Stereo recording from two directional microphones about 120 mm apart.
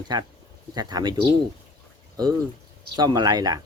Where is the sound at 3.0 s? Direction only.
35° right (ahead or behind).